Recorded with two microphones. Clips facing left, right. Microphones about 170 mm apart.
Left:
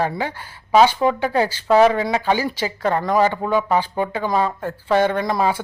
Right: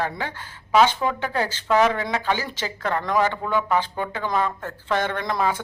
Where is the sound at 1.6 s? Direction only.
30° left (ahead or behind).